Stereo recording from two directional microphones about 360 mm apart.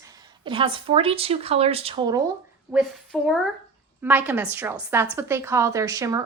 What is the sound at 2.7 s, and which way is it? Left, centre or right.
A woman's voice, centre.